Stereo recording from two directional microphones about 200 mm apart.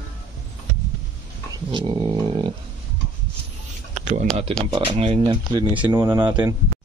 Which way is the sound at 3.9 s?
35° right (ahead or behind).